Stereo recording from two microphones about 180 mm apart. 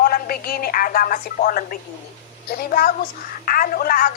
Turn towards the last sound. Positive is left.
turn(degrees=55)  # may be behind; listen again after turning